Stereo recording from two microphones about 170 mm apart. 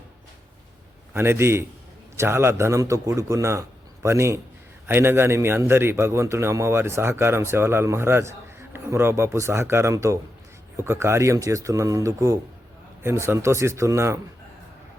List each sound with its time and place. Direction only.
1.1 s a man's voice: 15° right (ahead or behind)